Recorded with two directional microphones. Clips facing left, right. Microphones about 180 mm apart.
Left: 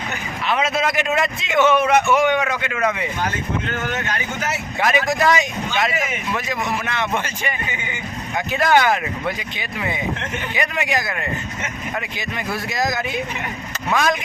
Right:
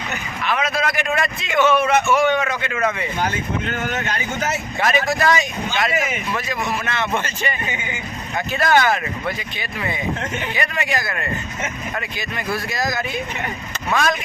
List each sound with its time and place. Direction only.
0.4 s a man's voice: 25° left (ahead or behind); by 2.7 s 10° left (ahead or behind)
4.8 s a man's voice: 15° left (ahead or behind)
8.5 s a man's voice: 15° left (ahead or behind)